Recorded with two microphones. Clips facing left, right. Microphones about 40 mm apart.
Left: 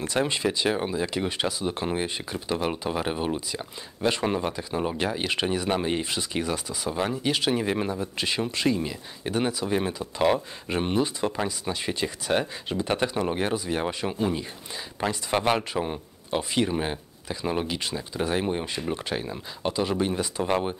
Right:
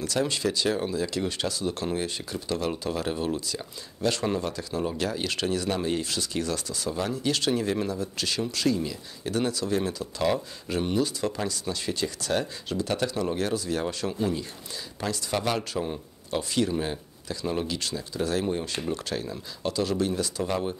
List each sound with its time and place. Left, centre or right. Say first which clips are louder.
0.0 s speech: left 1 dB; left